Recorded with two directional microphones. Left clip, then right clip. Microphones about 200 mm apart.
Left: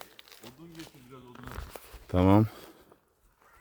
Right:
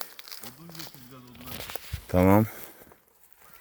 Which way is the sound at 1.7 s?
60° right (ahead or behind).